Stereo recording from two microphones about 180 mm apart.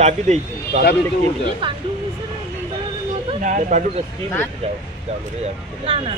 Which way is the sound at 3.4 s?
45° right (ahead or behind).